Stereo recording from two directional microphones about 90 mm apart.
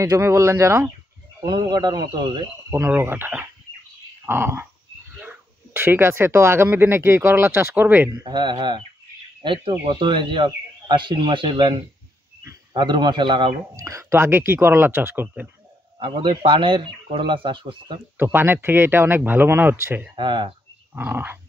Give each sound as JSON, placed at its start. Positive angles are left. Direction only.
{"t": 0.0, "sound": "speech", "side_deg": -35}
{"t": 1.4, "sound": "speech", "side_deg": -55}
{"t": 3.0, "sound": "speech", "side_deg": -20}
{"t": 8.1, "sound": "speech", "side_deg": -55}
{"t": 13.7, "sound": "speech", "side_deg": -40}
{"t": 14.2, "sound": "speech", "side_deg": -25}
{"t": 16.0, "sound": "speech", "side_deg": -65}
{"t": 18.1, "sound": "speech", "side_deg": -25}
{"t": 20.2, "sound": "speech", "side_deg": -60}
{"t": 20.9, "sound": "speech", "side_deg": -20}